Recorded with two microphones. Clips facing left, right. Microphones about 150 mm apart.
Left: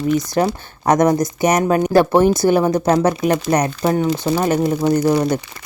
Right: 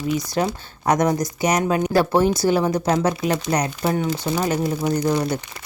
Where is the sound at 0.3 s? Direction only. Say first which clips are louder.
Left 5 dB; 45° left (ahead or behind).